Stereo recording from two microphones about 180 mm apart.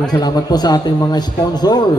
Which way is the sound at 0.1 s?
20° left (ahead or behind).